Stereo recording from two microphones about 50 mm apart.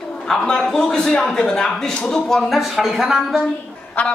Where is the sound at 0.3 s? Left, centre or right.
Centre.